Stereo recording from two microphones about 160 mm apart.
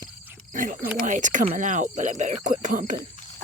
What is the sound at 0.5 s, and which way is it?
Speech, 55° right (ahead or behind).